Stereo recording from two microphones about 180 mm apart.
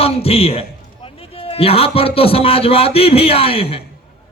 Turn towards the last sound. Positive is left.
turn(degrees=30)  # may be behind; listen again after turning